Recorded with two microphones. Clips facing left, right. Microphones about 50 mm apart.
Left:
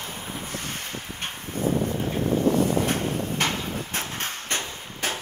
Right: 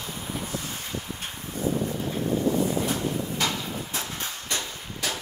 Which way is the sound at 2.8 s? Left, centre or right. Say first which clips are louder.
Left 2 dB; left.